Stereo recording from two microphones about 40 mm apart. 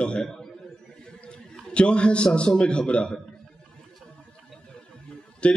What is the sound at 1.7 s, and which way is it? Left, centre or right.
A man's voice, left.